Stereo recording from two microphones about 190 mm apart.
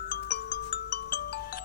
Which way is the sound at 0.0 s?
50° left (ahead or behind).